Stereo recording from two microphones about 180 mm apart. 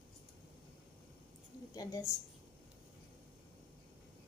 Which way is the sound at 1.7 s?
20° left (ahead or behind).